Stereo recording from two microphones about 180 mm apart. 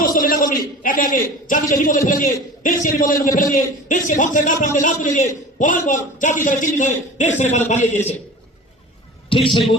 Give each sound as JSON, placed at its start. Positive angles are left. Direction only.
{"t": 0.0, "sound": "a sound", "side_deg": 50}
{"t": 2.0, "sound": "a man's voice", "side_deg": 50}
{"t": 9.3, "sound": "a man's voice", "side_deg": 30}